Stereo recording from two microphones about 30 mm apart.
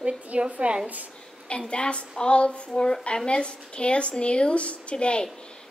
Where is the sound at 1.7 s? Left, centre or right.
Left.